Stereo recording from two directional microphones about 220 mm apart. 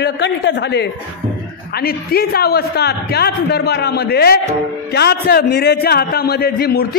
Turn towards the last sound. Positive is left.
turn(degrees=45)  # may be behind; listen again after turning